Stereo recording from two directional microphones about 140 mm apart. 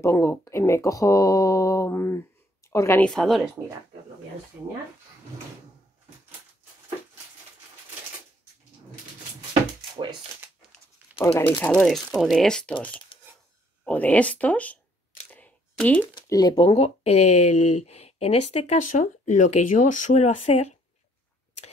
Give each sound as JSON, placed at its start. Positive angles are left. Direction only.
{"t": 0.0, "sound": "speech", "side_deg": 20}
{"t": 3.0, "sound": "speech", "side_deg": 5}
{"t": 4.6, "sound": "speech", "side_deg": -15}
{"t": 11.3, "sound": "speech", "side_deg": 10}
{"t": 13.1, "sound": "a sound", "side_deg": 40}
{"t": 13.8, "sound": "speech", "side_deg": 10}
{"t": 15.3, "sound": "a sound", "side_deg": 10}
{"t": 16.2, "sound": "speech", "side_deg": 25}
{"t": 16.5, "sound": "speech", "side_deg": 45}
{"t": 18.8, "sound": "speech", "side_deg": 65}